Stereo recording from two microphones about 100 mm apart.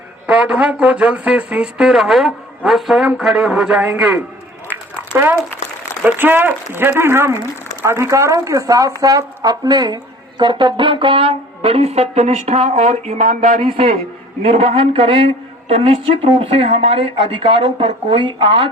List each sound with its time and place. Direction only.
0.3 s a man's voice: 10° right (ahead or behind)
4.7 s a sound: 20° right (ahead or behind)
6.0 s speech: 20° right (ahead or behind); by 13.1 s 90° right
13.6 s speech: 70° right (ahead or behind)
14.4 s speech: 90° right; by 15.2 s 60° right (ahead or behind)
15.7 s speech: 80° right
17.6 s speech: 55° right (ahead or behind)